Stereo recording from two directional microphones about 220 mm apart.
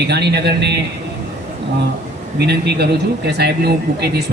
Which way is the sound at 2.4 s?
50° right (ahead or behind).